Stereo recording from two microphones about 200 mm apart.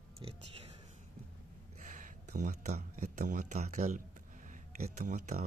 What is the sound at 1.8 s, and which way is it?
Speech, 40° right (ahead or behind).